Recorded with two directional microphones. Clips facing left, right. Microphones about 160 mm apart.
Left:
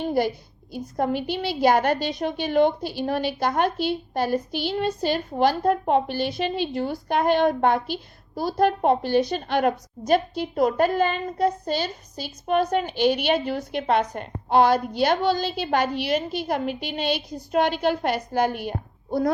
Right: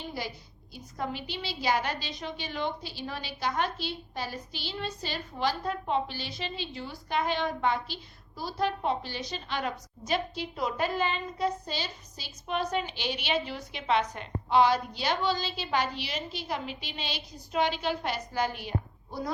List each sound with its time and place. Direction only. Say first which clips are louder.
0.0 s a woman's voice: left 14 dB; 55° left (ahead or behind)